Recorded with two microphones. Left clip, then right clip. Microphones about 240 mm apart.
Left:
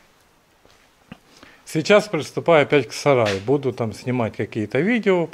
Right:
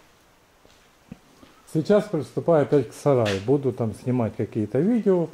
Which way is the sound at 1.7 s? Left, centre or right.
Centre.